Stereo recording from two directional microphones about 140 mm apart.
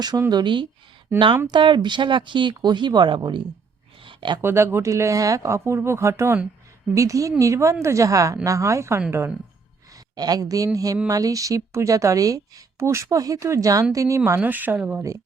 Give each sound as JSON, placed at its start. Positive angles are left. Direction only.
{"t": 0.0, "sound": "speech", "side_deg": -30}
{"t": 4.0, "sound": "a sound", "side_deg": -35}
{"t": 4.4, "sound": "speech", "side_deg": -20}
{"t": 10.2, "sound": "speech", "side_deg": -30}